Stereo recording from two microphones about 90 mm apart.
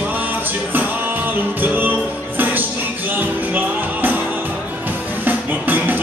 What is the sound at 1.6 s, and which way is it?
Music, 20° right (ahead or behind).